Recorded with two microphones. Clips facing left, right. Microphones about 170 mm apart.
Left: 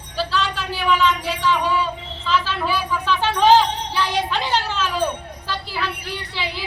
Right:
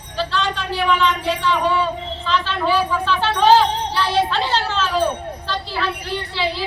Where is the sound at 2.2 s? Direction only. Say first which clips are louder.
Right 1 dB; 5° left (ahead or behind).